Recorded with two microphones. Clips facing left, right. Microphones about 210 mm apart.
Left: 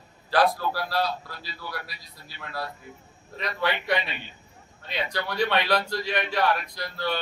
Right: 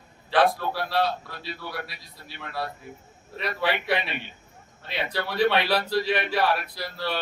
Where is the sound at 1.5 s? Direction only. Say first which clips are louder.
Right 3 dB; 60° right (ahead or behind).